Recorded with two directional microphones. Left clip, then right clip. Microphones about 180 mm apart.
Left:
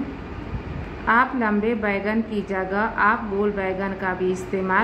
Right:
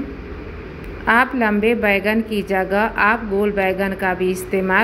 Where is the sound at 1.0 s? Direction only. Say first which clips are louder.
Right 4 dB; 25° right (ahead or behind).